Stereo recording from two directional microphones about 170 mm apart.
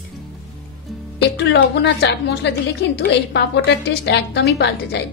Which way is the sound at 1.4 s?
90° left.